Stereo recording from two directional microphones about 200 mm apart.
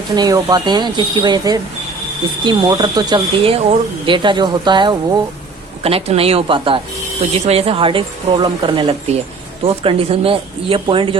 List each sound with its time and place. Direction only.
0.2 s speech: 15° right (ahead or behind)